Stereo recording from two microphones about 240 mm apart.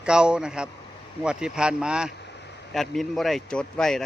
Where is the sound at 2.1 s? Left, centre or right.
Left.